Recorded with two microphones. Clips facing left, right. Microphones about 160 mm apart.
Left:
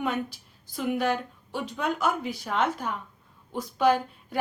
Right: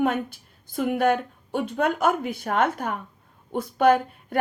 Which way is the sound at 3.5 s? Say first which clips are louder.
Right 4 dB; 55° right (ahead or behind).